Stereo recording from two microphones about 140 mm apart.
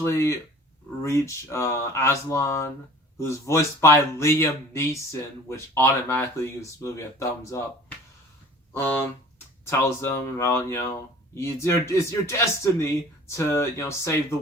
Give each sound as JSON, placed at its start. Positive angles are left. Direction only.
{"t": 0.0, "sound": "speech", "side_deg": 20}
{"t": 8.7, "sound": "speech", "side_deg": 15}